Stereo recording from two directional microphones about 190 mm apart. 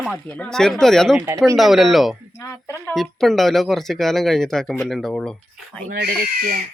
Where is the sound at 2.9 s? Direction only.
Centre (ahead or behind).